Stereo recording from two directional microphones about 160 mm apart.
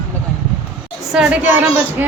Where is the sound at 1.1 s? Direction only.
5° right (ahead or behind).